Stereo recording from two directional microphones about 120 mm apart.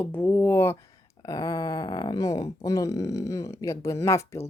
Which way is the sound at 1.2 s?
30° left (ahead or behind).